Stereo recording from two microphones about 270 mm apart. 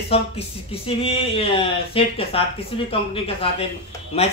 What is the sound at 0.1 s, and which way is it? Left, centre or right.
A man's voice, left.